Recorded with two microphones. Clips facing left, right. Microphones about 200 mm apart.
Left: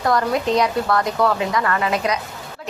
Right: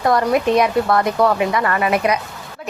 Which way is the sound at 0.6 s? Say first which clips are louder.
Right 3 dB; 25° right (ahead or behind).